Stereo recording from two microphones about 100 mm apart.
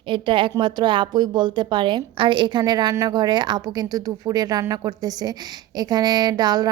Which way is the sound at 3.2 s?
45° right (ahead or behind).